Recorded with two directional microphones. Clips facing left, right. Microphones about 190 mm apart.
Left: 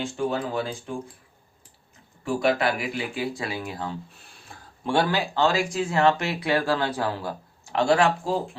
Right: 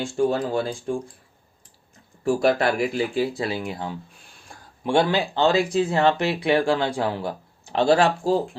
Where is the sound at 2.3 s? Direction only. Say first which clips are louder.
Right 3 dB; 45° right (ahead or behind).